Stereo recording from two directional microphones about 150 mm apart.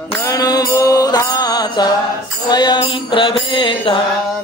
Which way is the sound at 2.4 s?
30° left (ahead or behind).